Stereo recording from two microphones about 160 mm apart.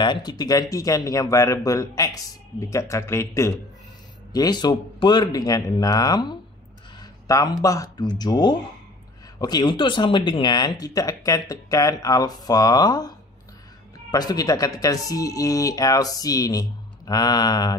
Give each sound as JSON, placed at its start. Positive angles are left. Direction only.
{"t": 0.0, "sound": "speech", "side_deg": 25}
{"t": 7.0, "sound": "a sound", "side_deg": 25}
{"t": 7.6, "sound": "speech", "side_deg": 20}
{"t": 14.1, "sound": "speech", "side_deg": 25}